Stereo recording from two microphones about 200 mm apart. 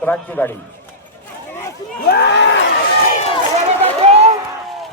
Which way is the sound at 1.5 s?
10° left (ahead or behind).